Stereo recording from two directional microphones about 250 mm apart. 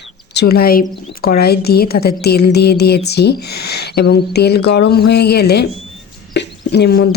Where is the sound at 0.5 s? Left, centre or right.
Left.